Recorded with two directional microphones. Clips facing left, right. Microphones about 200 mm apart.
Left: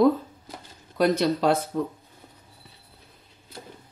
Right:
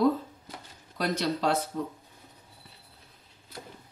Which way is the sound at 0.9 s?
55° left (ahead or behind).